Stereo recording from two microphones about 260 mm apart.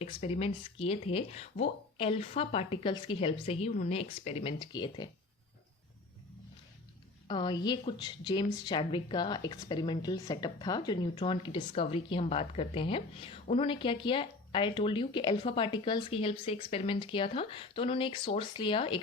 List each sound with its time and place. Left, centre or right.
0.0 s speech: left
7.3 s a woman's voice: centre